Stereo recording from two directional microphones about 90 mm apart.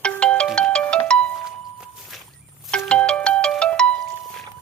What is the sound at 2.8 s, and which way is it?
Ringtone, 10° left (ahead or behind).